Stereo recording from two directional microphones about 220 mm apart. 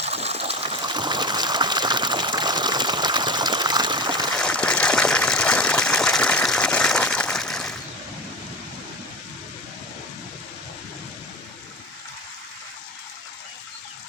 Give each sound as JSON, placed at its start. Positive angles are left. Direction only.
{"t": 0.0, "sound": "water", "side_deg": -30}
{"t": 4.4, "sound": "gush", "side_deg": 5}